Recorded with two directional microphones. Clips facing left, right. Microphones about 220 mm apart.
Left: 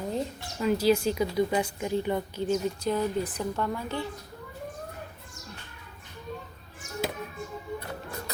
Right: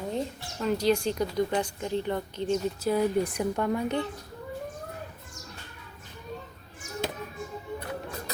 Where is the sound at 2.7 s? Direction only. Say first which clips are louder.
Right 3 dB; 5° right (ahead or behind).